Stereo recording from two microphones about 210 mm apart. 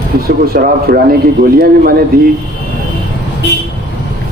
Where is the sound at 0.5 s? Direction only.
45° right (ahead or behind).